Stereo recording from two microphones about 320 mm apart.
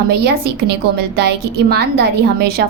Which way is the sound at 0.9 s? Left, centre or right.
Right.